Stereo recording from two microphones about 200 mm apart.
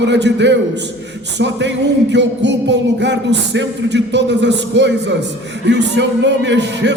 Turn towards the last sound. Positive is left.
turn(degrees=-60)  # may be behind; listen again after turning